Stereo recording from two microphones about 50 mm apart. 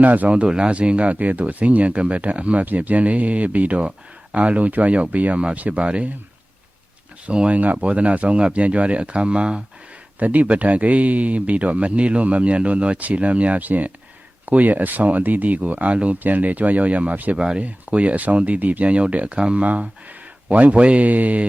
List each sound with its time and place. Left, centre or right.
0.0 s speech: right
0.3 s speech: centre
7.3 s speech: right
10.2 s speech: right
17.3 s speech: centre
17.6 s speech: right